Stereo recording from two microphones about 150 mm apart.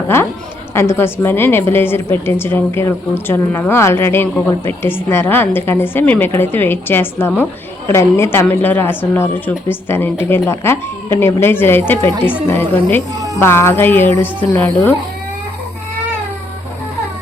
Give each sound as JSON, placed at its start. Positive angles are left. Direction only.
{"t": 0.7, "sound": "a woman's voice", "side_deg": 15}